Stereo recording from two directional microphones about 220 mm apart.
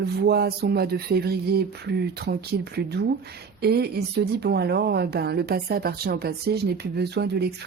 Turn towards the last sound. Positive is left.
turn(degrees=-50)  # may be behind; listen again after turning